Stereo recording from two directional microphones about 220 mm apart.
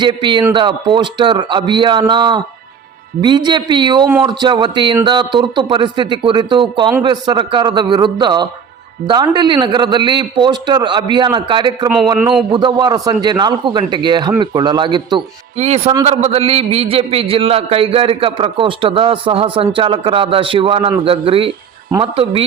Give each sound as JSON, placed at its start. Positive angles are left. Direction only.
{"t": 0.0, "sound": "a man's voice", "side_deg": -20}
{"t": 12.2, "sound": "a man's voice", "side_deg": 0}
{"t": 12.5, "sound": "a man's voice", "side_deg": -20}
{"t": 15.5, "sound": "a man's voice", "side_deg": -30}